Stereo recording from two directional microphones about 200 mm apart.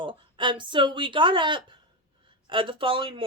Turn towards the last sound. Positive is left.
turn(degrees=-25)  # may be behind; listen again after turning